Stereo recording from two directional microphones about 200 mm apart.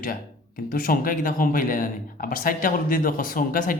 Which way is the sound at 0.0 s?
45° left (ahead or behind).